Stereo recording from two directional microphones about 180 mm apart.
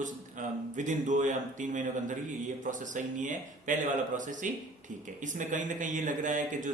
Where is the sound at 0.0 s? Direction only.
45° right (ahead or behind).